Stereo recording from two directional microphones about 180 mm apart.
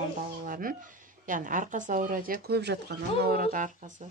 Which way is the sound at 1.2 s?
45° right (ahead or behind).